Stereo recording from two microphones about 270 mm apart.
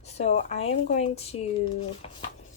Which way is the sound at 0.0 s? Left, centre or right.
Left.